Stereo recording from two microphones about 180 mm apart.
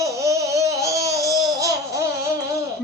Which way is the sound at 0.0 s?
15° right (ahead or behind).